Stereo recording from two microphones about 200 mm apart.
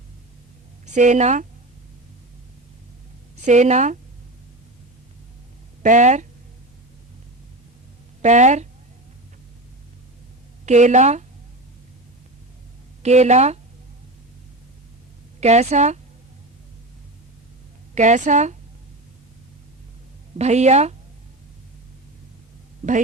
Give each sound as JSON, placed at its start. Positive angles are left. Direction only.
{"t": 0.9, "sound": "speech", "side_deg": -35}
{"t": 3.4, "sound": "a woman's voice", "side_deg": -35}
{"t": 5.8, "sound": "a woman's voice", "side_deg": -35}
{"t": 8.2, "sound": "a woman's voice", "side_deg": -35}
{"t": 10.7, "sound": "a woman's voice", "side_deg": -35}
{"t": 13.0, "sound": "a woman's voice", "side_deg": -35}
{"t": 15.4, "sound": "a woman's voice", "side_deg": -35}
{"t": 17.9, "sound": "a woman's voice", "side_deg": -35}
{"t": 20.4, "sound": "a woman's voice", "side_deg": -35}
{"t": 22.8, "sound": "a woman's voice", "side_deg": -35}